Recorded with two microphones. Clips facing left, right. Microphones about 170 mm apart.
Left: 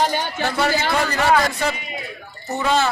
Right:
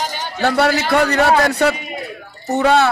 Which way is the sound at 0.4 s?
70° right (ahead or behind).